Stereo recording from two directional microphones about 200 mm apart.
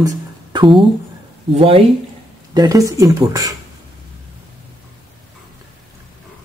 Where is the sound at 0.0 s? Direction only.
20° right (ahead or behind).